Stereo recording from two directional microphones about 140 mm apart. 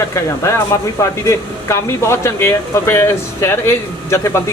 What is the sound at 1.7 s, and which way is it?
Speech, 20° left (ahead or behind).